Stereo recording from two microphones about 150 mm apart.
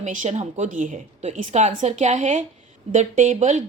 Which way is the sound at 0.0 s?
55° right (ahead or behind).